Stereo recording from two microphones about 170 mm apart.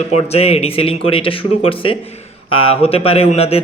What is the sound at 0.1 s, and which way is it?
A man's voice, 35° left (ahead or behind).